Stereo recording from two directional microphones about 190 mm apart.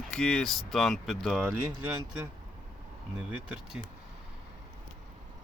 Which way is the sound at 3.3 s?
5° right (ahead or behind).